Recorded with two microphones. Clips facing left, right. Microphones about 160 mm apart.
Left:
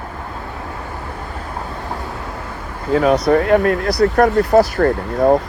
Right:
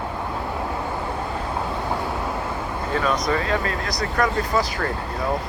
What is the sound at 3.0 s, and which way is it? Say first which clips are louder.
Speech: left 10 dB; 65° left (ahead or behind).